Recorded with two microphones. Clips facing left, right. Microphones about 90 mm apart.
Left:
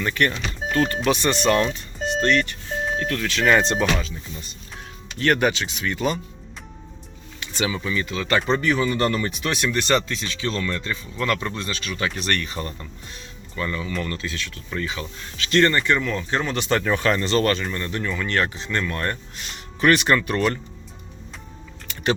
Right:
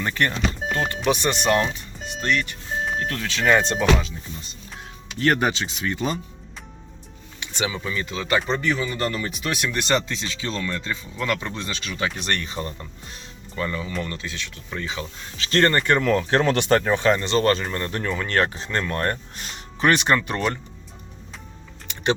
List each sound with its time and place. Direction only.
0.0 s speech: 30° right (ahead or behind); by 2.6 s 10° right (ahead or behind)
3.0 s speech: 25° right (ahead or behind)
3.5 s speech: 5° right (ahead or behind)
5.1 s speech: 30° right (ahead or behind)
7.3 s speech: 20° right (ahead or behind)
8.4 s speech: centre (ahead or behind)
9.8 s speech: 20° right (ahead or behind)
15.4 s speech: 40° right (ahead or behind)
15.9 s speech: 55° right (ahead or behind); by 16.6 s 80° right
16.8 s speech: 25° right (ahead or behind)
17.7 s speech: 40° right (ahead or behind)
19.8 s speech: 25° right (ahead or behind)